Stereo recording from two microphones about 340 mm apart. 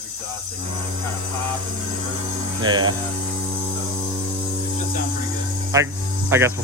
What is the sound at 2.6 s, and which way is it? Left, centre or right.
Speech, centre.